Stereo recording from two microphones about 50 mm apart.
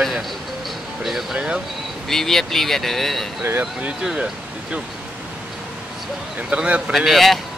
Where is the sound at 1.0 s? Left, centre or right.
Centre.